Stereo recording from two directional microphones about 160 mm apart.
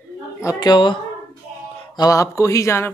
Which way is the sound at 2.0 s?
20° left (ahead or behind).